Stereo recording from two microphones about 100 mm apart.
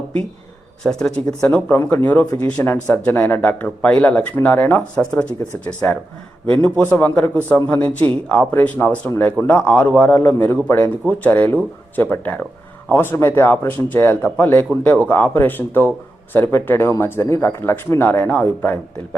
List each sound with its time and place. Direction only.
0.9 s speech: 5° left (ahead or behind)